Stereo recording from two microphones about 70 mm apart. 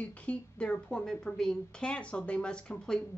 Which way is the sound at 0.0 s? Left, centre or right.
Centre.